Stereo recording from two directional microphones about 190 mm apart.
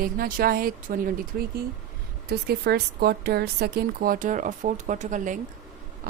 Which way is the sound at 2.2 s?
55° right (ahead or behind).